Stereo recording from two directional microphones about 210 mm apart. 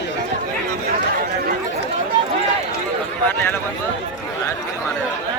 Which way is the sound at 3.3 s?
10° left (ahead or behind).